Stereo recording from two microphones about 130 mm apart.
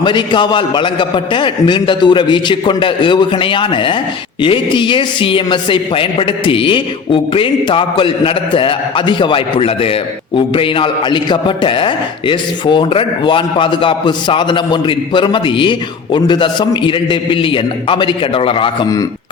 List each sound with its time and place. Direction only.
0.0 s speech: 35° left (ahead or behind)